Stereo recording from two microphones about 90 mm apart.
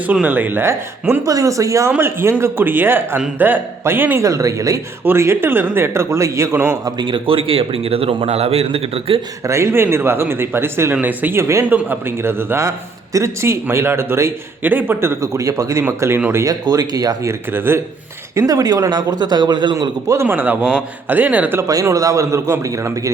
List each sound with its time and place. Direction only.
0.1 s a man's voice: 20° right (ahead or behind)
1.2 s a man's voice: 40° right (ahead or behind); by 4.2 s 20° right (ahead or behind)
4.2 s a man's voice: 35° right (ahead or behind)
7.0 s a man's voice: 70° right (ahead or behind); by 9.2 s 90° right
9.4 s a man's voice: 30° right (ahead or behind)
17.5 s a man's voice: 25° right (ahead or behind)
18.3 s speech: 40° right (ahead or behind); by 19.7 s 55° right (ahead or behind)
19.7 s a man's voice: 40° right (ahead or behind)
20.2 s a man's voice: 20° right (ahead or behind)
21.8 s a man's voice: 35° right (ahead or behind)